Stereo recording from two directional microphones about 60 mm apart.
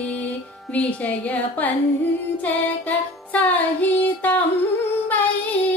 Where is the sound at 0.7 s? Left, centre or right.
Left.